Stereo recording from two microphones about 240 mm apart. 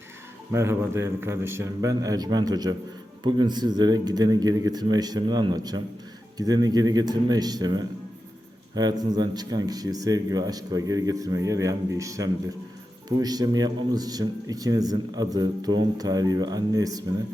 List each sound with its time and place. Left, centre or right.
0.5 s speech: centre